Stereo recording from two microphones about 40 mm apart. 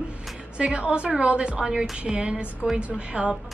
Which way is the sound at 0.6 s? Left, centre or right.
Right.